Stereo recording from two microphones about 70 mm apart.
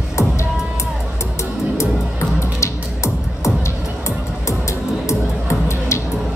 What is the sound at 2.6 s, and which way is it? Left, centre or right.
Music, left.